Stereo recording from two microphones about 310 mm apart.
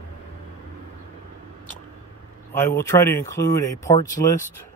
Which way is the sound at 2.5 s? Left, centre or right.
Centre.